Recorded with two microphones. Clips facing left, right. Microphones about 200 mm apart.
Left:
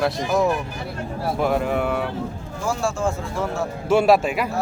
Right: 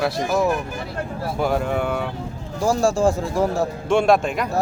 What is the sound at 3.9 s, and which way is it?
Speech, 5° left (ahead or behind).